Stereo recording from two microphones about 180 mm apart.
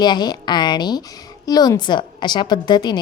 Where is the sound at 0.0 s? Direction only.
25° left (ahead or behind).